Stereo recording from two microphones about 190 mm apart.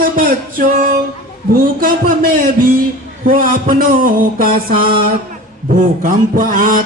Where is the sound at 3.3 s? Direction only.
45° right (ahead or behind).